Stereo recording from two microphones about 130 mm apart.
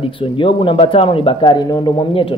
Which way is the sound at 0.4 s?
40° left (ahead or behind).